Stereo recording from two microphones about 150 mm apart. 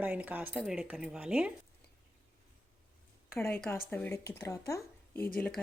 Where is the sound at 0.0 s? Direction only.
10° right (ahead or behind).